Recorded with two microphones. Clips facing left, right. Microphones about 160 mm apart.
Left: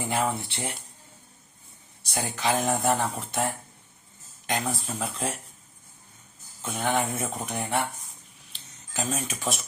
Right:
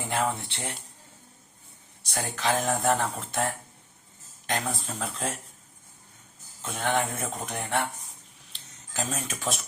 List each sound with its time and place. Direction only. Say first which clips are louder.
0.1 s speech: even; 5° left (ahead or behind)
2.3 s speech: left 1 dB; 5° left (ahead or behind)
6.6 s speech: left 1 dB; 5° left (ahead or behind)
8.5 s cutlery: even; centre (ahead or behind)